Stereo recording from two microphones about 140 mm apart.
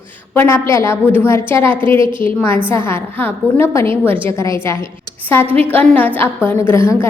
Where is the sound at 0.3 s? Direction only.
15° left (ahead or behind).